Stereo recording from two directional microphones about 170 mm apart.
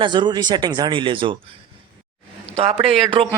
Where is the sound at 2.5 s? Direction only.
35° right (ahead or behind).